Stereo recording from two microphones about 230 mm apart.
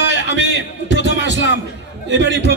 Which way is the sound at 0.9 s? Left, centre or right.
Left.